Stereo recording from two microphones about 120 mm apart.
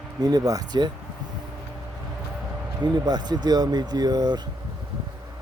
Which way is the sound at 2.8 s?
35° right (ahead or behind).